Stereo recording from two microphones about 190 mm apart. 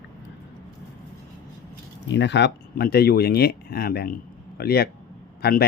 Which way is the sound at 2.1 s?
65° left (ahead or behind).